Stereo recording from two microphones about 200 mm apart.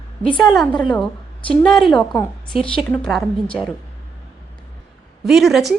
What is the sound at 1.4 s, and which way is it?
A woman's voice, 5° left (ahead or behind).